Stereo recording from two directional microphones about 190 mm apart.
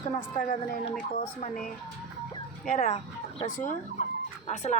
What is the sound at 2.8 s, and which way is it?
Speech, 35° left (ahead or behind).